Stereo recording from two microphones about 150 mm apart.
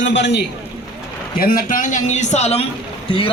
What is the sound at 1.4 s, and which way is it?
A man's voice, 75° left (ahead or behind).